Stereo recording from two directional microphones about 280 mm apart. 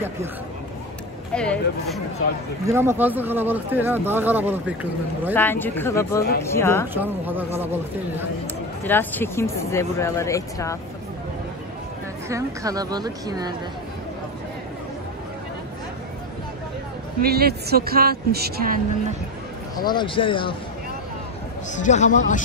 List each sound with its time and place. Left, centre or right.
1.3 s speech: centre
2.6 s speech: centre
5.3 s speech: centre
6.9 s speech: centre
8.8 s speech: centre
12.3 s speech: centre
17.2 s speech: right
19.8 s speech: centre
21.7 s a man's voice: left